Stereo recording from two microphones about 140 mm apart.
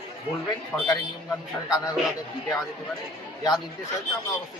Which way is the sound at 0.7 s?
5° left (ahead or behind).